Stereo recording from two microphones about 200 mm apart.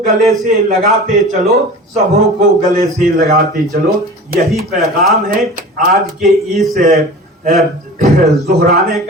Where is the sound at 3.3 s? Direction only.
45° right (ahead or behind).